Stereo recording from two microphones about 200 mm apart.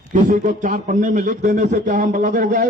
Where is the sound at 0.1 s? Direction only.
40° right (ahead or behind).